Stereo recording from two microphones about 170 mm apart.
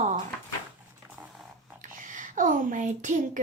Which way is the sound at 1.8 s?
50° right (ahead or behind).